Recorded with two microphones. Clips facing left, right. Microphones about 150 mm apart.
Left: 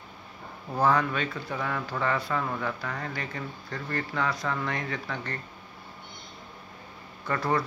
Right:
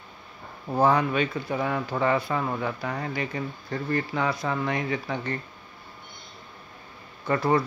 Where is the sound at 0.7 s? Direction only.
20° right (ahead or behind).